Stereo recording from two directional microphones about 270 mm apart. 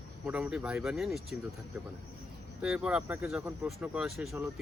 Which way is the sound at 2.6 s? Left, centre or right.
Centre.